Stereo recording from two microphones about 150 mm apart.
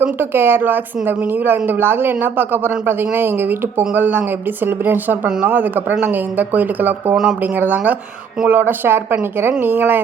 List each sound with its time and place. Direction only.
0.0 s a woman's voice: 15° right (ahead or behind)